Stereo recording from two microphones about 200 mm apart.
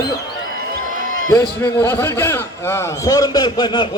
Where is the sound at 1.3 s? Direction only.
20° left (ahead or behind).